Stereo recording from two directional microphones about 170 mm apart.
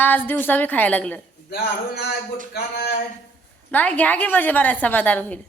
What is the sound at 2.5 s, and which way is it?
Speech, 80° left.